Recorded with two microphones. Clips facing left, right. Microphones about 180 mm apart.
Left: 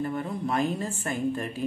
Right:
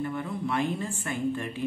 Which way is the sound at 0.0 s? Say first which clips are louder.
Left 1 dB; 40° left (ahead or behind).